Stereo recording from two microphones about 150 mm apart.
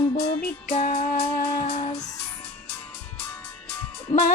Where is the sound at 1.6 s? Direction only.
45° left (ahead or behind).